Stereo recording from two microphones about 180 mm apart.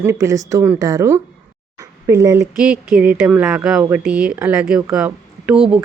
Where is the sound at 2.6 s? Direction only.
5° right (ahead or behind).